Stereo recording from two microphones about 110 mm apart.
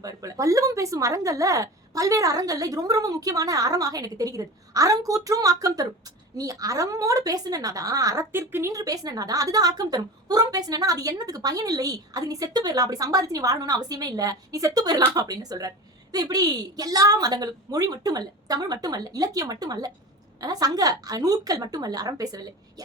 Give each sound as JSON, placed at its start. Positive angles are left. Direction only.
{"t": 0.0, "sound": "a woman's voice", "side_deg": -30}
{"t": 8.3, "sound": "a woman's voice", "side_deg": -20}